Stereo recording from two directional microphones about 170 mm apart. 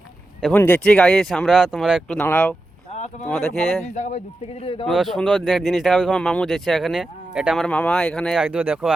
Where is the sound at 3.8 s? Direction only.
45° left (ahead or behind).